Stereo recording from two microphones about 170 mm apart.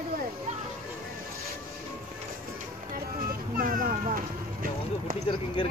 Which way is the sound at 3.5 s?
55° right (ahead or behind).